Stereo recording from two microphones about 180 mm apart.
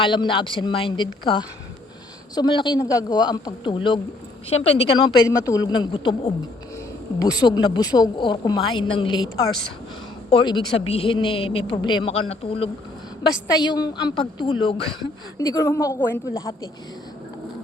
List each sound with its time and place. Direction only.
0.0 s a man's voice: 25° left (ahead or behind)
7.2 s a man's voice: 20° left (ahead or behind)